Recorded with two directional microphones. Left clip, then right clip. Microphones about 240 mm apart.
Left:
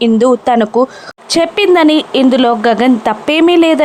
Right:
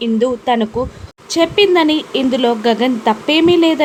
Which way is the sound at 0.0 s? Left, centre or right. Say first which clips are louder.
Left 6 dB; left.